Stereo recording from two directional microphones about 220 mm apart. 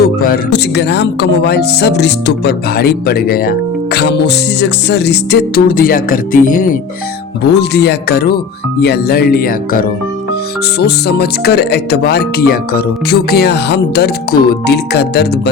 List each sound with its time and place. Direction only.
0.0 s speech: 45° left (ahead or behind)
7.4 s speech: 50° left (ahead or behind)